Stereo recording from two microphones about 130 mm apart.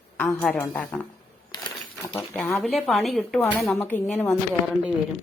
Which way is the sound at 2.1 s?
15° left (ahead or behind).